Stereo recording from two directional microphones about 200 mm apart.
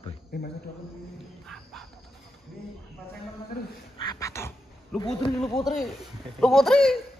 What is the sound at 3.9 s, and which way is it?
Cat, 20° left (ahead or behind).